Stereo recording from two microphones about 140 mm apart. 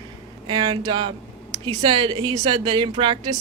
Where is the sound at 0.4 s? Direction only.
35° right (ahead or behind).